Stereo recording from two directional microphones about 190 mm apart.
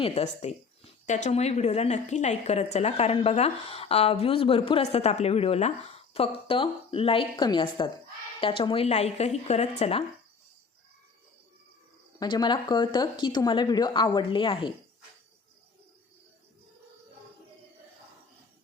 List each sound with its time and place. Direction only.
0.0 s a woman's voice: 35° left (ahead or behind)
12.2 s a woman's voice: 25° left (ahead or behind)